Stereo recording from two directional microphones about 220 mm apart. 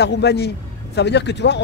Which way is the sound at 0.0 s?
50° left (ahead or behind).